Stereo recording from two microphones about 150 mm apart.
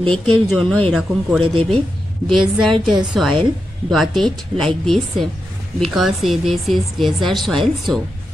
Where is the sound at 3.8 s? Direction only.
Centre (ahead or behind).